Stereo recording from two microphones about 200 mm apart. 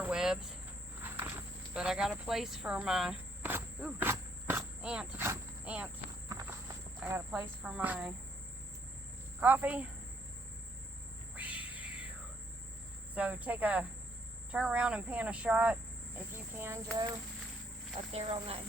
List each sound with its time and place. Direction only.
0.0 s cricket: 5° right (ahead or behind)
1.0 s a sound: 10° right (ahead or behind)
6.2 s walk: 15° right (ahead or behind)
7.0 s speech: 10° right (ahead or behind)
9.4 s speech: 10° right (ahead or behind)
11.3 s a sound: 5° right (ahead or behind)
13.1 s speech: 5° right (ahead or behind)
17.9 s speech: 30° right (ahead or behind)